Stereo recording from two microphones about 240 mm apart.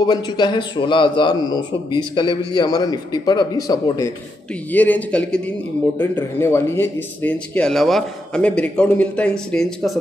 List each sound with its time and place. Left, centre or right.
0.0 s a man's voice: centre